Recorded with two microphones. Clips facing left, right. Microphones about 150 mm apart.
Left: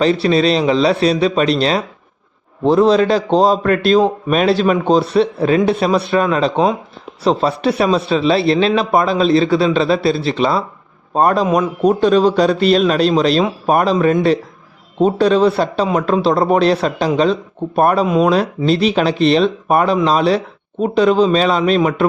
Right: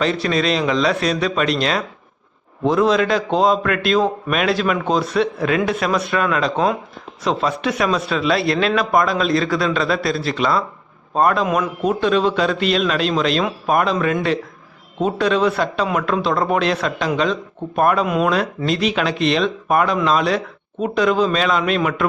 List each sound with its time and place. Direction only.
0.0 s a man's voice: 30° left (ahead or behind)